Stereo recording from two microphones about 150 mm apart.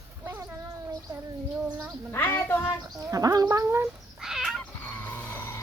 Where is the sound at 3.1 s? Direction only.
25° right (ahead or behind).